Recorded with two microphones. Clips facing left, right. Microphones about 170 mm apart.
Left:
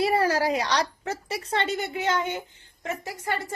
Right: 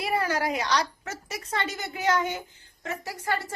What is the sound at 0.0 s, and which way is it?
A woman's voice, 30° left (ahead or behind).